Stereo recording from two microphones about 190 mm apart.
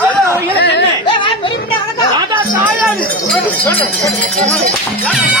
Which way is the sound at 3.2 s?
10° left (ahead or behind).